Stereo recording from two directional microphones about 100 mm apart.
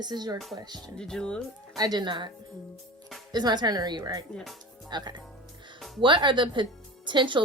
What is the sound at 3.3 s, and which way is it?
Speech, 45° right (ahead or behind).